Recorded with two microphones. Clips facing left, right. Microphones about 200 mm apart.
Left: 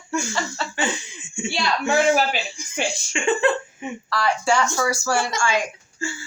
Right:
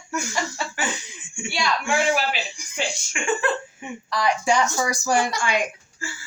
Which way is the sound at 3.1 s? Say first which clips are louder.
Left 4 dB; 25° left (ahead or behind).